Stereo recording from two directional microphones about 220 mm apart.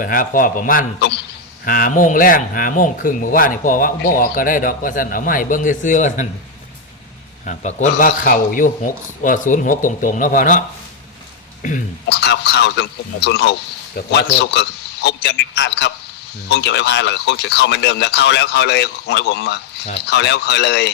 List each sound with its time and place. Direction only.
0.0 s speech: 40° left (ahead or behind)
7.4 s speech: 35° left (ahead or behind)
11.6 s speech: 35° left (ahead or behind)
12.0 s speech: 50° left (ahead or behind)